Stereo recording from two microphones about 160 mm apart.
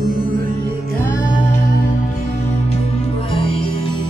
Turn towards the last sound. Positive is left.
turn(degrees=35)  # may be behind; listen again after turning